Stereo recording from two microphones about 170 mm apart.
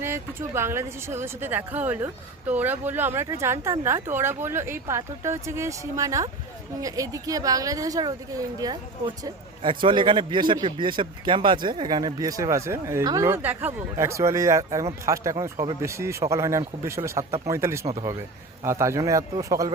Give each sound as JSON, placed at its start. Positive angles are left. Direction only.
{"t": 0.0, "sound": "a man's voice", "side_deg": -15}